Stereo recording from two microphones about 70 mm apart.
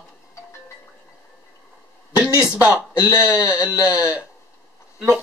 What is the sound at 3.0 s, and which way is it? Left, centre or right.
Speech, left.